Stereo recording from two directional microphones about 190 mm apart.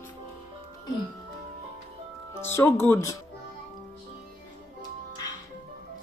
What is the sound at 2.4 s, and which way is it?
Speech, 10° left (ahead or behind).